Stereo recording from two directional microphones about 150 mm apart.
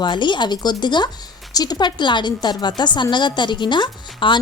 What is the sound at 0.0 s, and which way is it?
A woman's voice, 30° left (ahead or behind).